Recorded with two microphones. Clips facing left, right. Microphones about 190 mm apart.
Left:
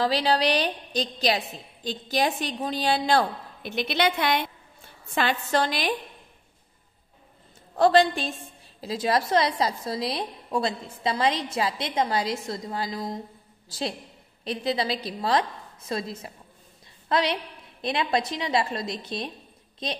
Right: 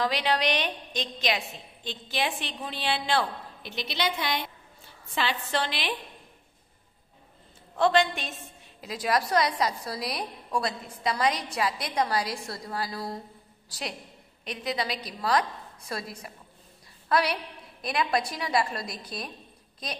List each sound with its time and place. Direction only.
0.0 s a woman's voice: 35° left (ahead or behind); by 4.5 s 60° left (ahead or behind)
5.1 s a woman's voice: 50° left (ahead or behind)
7.7 s a woman's voice: 35° left (ahead or behind)